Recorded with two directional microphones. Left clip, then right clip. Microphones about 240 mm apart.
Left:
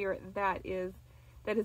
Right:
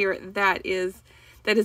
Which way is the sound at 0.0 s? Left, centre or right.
Right.